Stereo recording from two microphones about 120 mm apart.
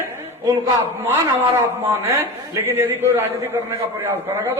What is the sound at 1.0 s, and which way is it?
A man's voice, 20° right (ahead or behind).